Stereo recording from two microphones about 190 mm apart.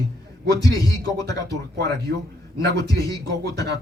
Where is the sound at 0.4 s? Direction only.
20° left (ahead or behind).